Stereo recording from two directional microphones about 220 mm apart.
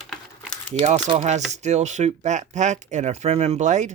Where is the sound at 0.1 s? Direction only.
5° left (ahead or behind).